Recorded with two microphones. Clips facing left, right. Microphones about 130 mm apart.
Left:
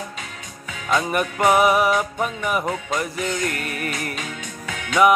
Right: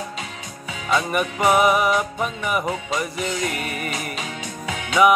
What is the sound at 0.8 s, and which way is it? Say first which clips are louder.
Music: even; centre (ahead or behind).